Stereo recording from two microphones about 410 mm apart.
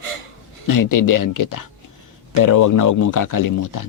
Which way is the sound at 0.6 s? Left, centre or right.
Left.